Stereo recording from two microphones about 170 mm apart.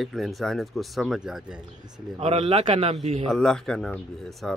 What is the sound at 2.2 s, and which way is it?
A man's voice, 35° right (ahead or behind).